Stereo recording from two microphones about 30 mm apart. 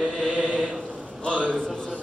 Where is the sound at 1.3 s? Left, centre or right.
Right.